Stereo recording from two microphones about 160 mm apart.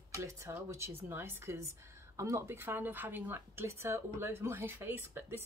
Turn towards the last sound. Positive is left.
turn(degrees=-15)  # may be behind; listen again after turning